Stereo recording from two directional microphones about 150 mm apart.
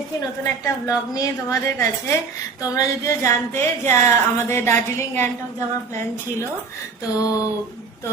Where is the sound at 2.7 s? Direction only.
20° left (ahead or behind).